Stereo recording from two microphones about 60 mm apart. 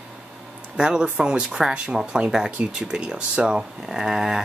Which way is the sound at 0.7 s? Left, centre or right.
Centre.